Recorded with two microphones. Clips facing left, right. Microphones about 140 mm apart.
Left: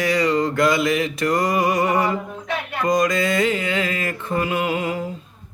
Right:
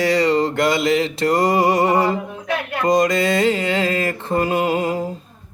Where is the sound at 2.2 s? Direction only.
5° right (ahead or behind).